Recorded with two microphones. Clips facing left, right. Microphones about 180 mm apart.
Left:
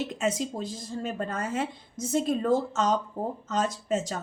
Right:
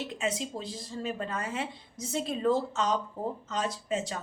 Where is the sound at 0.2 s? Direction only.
45° left (ahead or behind).